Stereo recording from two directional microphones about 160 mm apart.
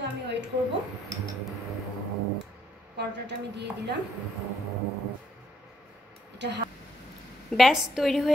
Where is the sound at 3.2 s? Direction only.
90° right.